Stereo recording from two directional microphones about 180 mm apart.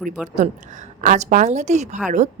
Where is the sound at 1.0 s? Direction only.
40° right (ahead or behind).